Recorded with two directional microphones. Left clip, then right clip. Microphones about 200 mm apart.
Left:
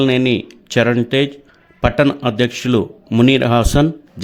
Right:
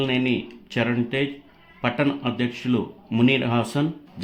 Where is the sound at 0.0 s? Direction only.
50° left (ahead or behind).